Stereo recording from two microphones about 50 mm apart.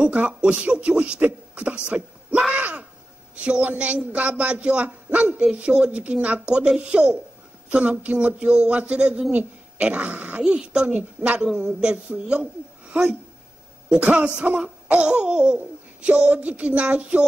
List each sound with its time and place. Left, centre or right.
0.0 s speech: right
2.5 s groan: right
3.4 s speech: right
5.4 s speech: centre
10.4 s speech: centre